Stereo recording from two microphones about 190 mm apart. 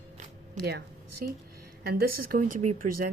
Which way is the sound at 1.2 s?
50° right (ahead or behind).